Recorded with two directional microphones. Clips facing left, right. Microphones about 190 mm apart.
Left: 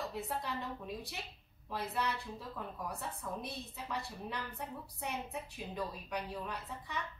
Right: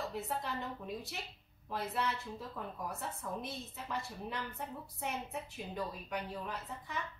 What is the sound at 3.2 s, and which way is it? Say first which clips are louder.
A woman's voice: right 1 dB; centre (ahead or behind).